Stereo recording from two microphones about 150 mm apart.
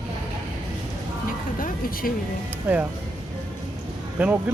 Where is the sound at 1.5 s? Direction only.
70° left (ahead or behind).